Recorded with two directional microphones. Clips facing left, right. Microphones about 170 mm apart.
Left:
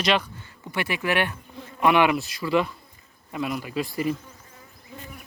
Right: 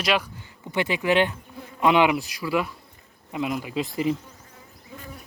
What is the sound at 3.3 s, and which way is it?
Speech, 20° right (ahead or behind).